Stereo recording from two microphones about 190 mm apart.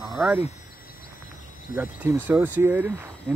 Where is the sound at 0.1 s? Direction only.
10° right (ahead or behind).